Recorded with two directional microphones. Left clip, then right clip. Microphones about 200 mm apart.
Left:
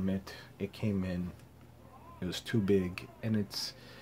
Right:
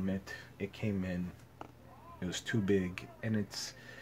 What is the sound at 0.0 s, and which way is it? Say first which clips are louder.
Speech: left 1 dB; 20° left (ahead or behind).